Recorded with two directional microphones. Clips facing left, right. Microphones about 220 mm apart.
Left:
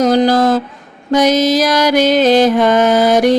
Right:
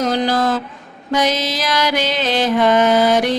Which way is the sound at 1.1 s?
45° left (ahead or behind).